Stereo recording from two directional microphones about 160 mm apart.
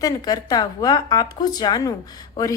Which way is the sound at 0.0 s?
25° left (ahead or behind).